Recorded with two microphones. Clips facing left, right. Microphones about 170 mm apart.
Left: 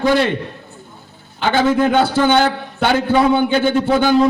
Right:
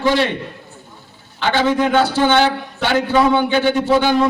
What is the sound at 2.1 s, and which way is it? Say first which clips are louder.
A man's voice: left 1 dB; 50° left (ahead or behind).